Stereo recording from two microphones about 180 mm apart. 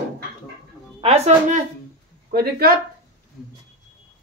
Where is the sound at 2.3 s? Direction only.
60° right (ahead or behind).